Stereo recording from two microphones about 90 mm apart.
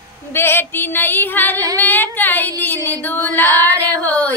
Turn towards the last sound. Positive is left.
turn(degrees=20)  # may be behind; listen again after turning